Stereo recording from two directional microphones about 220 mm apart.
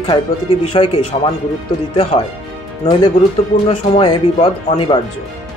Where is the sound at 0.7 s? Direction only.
20° left (ahead or behind).